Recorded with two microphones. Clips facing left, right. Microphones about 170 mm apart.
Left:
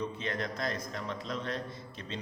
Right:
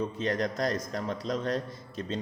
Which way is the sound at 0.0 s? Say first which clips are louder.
Right 6 dB; 40° right (ahead or behind).